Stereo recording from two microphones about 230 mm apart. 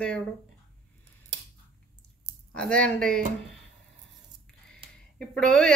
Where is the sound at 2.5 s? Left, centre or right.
Centre.